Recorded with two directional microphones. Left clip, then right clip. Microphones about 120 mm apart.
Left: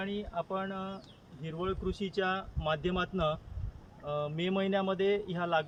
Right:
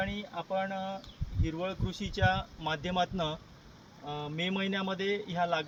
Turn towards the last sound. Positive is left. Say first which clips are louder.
# even
turn(degrees=15)  # may be behind; listen again after turning